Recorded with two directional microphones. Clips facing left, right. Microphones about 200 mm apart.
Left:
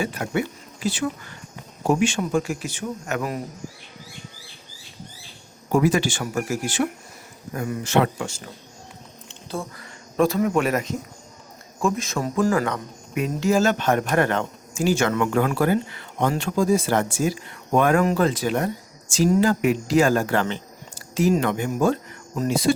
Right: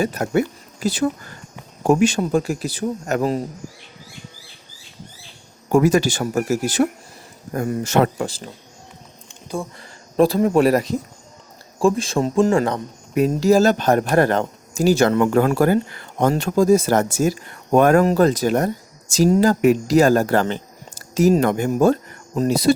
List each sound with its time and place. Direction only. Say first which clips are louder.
0.0 s speech: right 5 dB; 40° right (ahead or behind)
5.7 s speech: right 4 dB; 45° right (ahead or behind)
9.7 s speech: right 5 dB; 30° right (ahead or behind)